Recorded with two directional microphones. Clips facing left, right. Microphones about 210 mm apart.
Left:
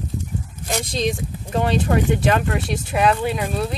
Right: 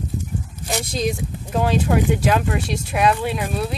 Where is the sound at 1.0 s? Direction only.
5° right (ahead or behind).